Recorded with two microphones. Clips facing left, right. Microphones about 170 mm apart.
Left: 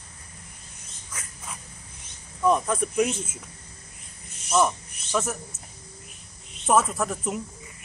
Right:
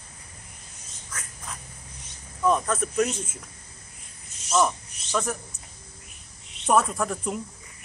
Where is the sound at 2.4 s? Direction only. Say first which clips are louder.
Left 1 dB; 10° left (ahead or behind).